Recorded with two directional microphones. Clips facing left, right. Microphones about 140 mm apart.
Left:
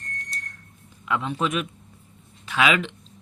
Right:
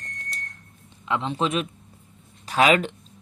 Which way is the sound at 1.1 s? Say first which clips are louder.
Right 1 dB; 25° right (ahead or behind).